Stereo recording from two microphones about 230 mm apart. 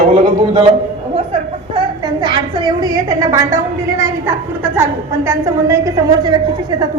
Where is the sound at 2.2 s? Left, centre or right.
Centre.